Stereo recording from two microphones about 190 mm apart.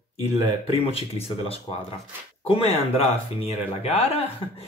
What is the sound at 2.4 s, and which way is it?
Speech, 30° left (ahead or behind).